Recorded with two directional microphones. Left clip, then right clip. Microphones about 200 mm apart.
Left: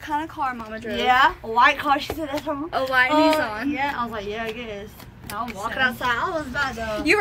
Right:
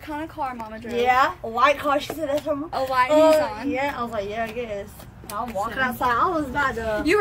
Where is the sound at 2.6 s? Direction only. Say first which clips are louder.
Left 2 dB; centre (ahead or behind).